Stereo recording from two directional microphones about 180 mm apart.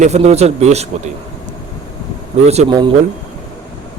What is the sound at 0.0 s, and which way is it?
Speech, 40° right (ahead or behind).